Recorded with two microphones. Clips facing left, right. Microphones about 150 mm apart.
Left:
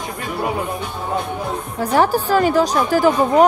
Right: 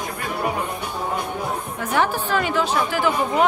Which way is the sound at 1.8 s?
35° left (ahead or behind).